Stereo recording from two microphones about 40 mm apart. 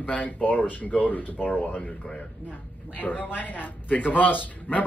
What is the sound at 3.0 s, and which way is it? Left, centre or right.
A woman's voice, left.